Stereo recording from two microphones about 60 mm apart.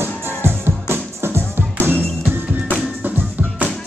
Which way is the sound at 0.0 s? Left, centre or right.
Right.